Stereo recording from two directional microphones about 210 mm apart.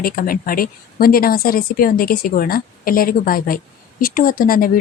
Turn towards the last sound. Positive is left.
turn(degrees=45)  # may be behind; listen again after turning